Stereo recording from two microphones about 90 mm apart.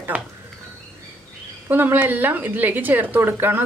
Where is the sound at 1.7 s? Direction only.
20° right (ahead or behind).